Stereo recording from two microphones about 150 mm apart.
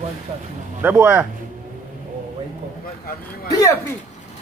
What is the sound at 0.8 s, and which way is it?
Speech, 15° right (ahead or behind).